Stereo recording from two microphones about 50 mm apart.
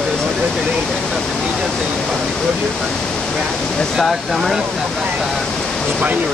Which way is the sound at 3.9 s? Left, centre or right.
Centre.